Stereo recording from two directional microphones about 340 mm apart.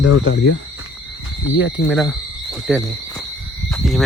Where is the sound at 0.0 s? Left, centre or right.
Left.